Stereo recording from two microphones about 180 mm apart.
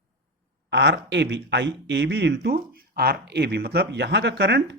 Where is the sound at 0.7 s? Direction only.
75° right (ahead or behind).